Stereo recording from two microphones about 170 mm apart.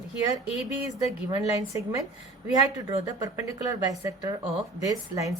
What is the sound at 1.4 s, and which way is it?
A woman's voice, 20° right (ahead or behind).